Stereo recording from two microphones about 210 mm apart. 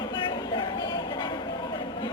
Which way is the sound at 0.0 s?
20° left (ahead or behind).